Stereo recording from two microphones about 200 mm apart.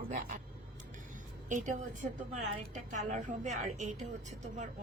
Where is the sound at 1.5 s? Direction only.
40° right (ahead or behind).